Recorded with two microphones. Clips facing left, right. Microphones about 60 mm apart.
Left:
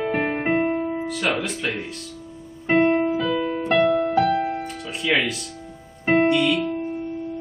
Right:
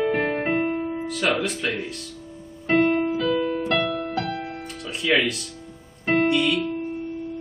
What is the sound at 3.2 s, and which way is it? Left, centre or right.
Music, centre.